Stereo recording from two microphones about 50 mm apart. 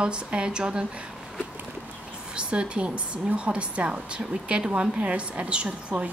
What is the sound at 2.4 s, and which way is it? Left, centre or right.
Speech, right.